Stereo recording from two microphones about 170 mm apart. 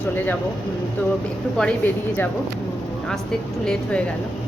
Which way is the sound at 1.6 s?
5° left (ahead or behind).